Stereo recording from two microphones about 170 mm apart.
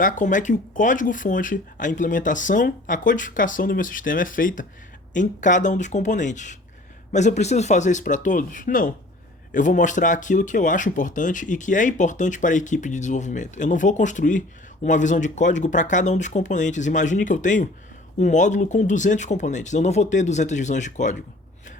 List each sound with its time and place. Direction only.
0.0 s speech: 50° left (ahead or behind)